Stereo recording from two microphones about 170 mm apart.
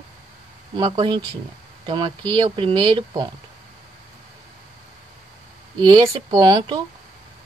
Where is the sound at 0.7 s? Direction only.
30° right (ahead or behind).